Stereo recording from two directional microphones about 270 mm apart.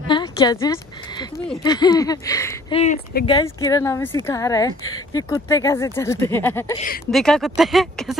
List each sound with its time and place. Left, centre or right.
0.1 s speech: centre
2.8 s speech: left
3.3 s speech: centre